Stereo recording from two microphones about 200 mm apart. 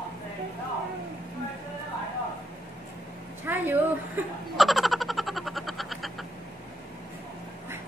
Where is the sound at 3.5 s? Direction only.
10° right (ahead or behind).